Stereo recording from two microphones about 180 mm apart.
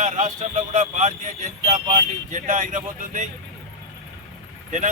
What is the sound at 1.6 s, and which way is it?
Speech, 40° right (ahead or behind).